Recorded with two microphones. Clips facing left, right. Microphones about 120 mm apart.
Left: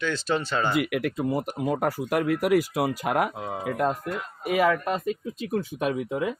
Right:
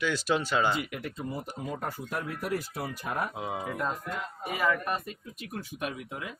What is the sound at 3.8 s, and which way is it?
Speech, 75° left (ahead or behind).